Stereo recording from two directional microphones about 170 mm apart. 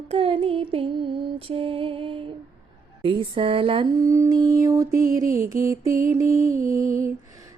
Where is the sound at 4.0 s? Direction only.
15° right (ahead or behind).